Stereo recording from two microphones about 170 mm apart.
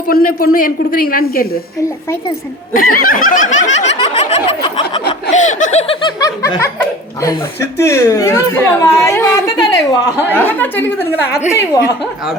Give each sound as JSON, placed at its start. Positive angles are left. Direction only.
{"t": 0.1, "sound": "a man's voice", "side_deg": 60}
{"t": 2.7, "sound": "snicker", "side_deg": 55}
{"t": 3.8, "sound": "a sound", "side_deg": 35}
{"t": 5.3, "sound": "snicker", "side_deg": 45}
{"t": 5.9, "sound": "a woman's voice", "side_deg": 25}
{"t": 10.3, "sound": "a woman's voice", "side_deg": 10}